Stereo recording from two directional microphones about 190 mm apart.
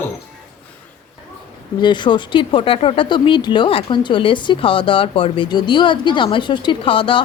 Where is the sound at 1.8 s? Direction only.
25° left (ahead or behind).